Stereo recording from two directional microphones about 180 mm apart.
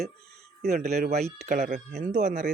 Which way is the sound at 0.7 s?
40° right (ahead or behind).